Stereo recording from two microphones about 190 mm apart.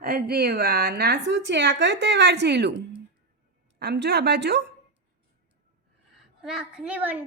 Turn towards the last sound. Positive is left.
turn(degrees=-10)  # may be behind; listen again after turning